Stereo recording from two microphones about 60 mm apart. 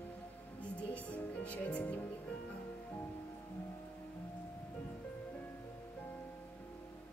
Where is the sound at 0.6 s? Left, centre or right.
Left.